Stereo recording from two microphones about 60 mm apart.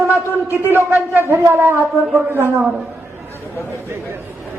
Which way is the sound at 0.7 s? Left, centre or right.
Right.